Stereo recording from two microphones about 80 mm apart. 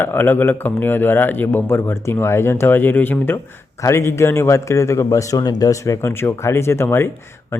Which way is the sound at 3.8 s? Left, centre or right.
Left.